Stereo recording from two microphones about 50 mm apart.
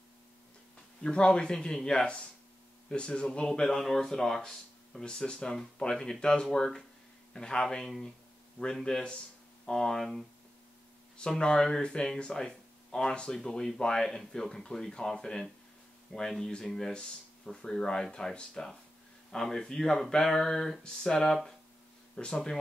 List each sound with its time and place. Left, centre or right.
1.0 s speech: centre
5.0 s speech: centre
11.1 s speech: centre